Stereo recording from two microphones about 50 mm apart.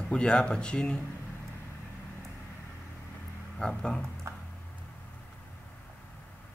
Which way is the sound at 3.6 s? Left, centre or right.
Centre.